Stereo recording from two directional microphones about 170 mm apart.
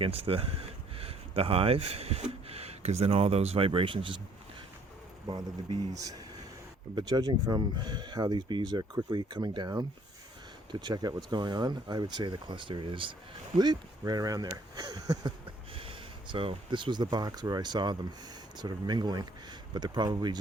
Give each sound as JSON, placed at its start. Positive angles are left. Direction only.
{"t": 0.0, "sound": "speech", "side_deg": -35}
{"t": 6.9, "sound": "speech", "side_deg": -25}
{"t": 15.7, "sound": "speech", "side_deg": -30}